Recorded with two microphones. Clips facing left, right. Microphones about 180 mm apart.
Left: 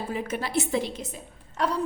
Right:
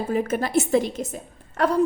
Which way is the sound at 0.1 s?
45° right (ahead or behind).